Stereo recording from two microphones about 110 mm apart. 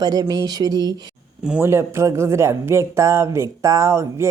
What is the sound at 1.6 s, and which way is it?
Speech, 25° right (ahead or behind).